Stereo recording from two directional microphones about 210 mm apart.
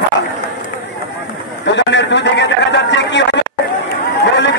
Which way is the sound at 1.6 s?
55° left (ahead or behind).